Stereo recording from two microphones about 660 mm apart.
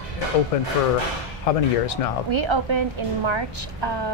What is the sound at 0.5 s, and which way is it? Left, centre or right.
Speech, left.